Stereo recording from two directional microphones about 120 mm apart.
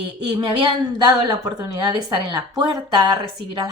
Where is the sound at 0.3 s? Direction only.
40° right (ahead or behind).